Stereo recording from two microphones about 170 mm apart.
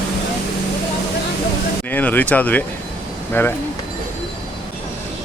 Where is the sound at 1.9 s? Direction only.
10° left (ahead or behind).